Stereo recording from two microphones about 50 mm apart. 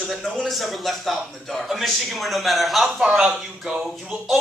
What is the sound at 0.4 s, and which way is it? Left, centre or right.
Speech, centre.